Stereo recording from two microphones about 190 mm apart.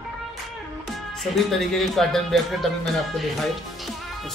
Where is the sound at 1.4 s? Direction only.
Centre (ahead or behind).